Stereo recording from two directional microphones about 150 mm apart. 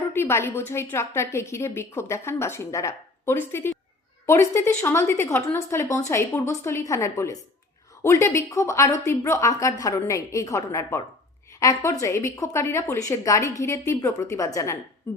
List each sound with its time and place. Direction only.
0.1 s a woman's voice: 15° left (ahead or behind)